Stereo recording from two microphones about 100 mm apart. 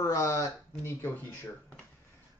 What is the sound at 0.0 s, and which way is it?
Speech, 35° left (ahead or behind).